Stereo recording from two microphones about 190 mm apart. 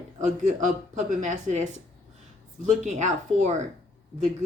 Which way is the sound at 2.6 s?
40° right (ahead or behind).